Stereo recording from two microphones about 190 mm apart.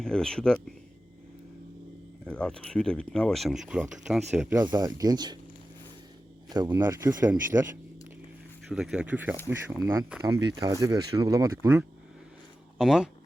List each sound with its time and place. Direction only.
0.0 s speech: 5° left (ahead or behind)
2.2 s speech: 5° left (ahead or behind)
4.5 s speech: 20° right (ahead or behind)
6.5 s speech: 15° right (ahead or behind)
8.7 s speech: 5° right (ahead or behind)
12.8 s speech: centre (ahead or behind)